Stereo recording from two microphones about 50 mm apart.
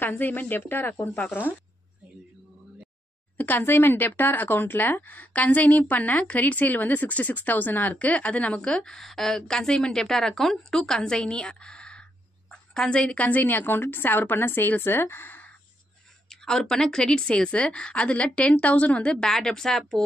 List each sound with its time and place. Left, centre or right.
0.0 s a woman's voice: left
3.3 s a woman's voice: left
16.3 s a woman's voice: centre